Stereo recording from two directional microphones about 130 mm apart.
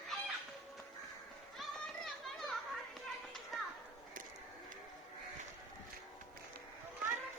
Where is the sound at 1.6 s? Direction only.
Centre (ahead or behind).